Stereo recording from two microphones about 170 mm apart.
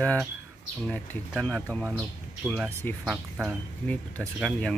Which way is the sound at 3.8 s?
5° left (ahead or behind).